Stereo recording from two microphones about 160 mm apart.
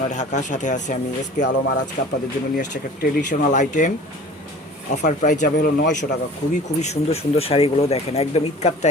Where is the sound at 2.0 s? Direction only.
55° left (ahead or behind).